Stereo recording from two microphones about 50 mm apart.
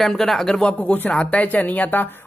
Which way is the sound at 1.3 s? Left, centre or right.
Left.